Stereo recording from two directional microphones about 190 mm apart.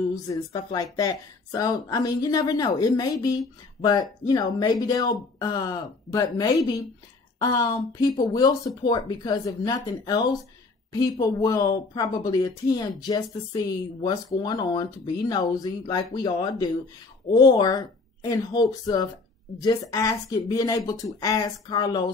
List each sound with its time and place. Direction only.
0.5 s speech: 20° left (ahead or behind)